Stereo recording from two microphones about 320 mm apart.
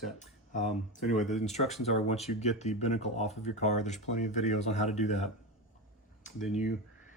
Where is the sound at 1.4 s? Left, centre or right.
Left.